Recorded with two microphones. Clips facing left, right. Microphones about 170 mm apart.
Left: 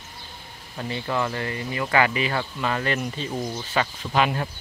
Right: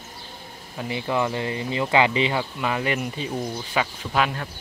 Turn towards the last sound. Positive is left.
turn(degrees=-5)  # may be behind; listen again after turning